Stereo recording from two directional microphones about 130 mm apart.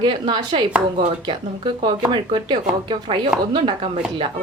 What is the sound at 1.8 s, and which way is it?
A woman's voice, 40° right (ahead or behind).